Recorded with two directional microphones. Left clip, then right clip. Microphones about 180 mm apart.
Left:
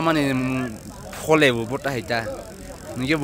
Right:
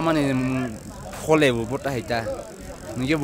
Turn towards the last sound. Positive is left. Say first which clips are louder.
# left 1 dB
turn(degrees=-10)  # may be behind; listen again after turning